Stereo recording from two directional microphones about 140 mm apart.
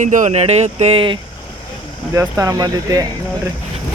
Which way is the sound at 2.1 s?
25° right (ahead or behind).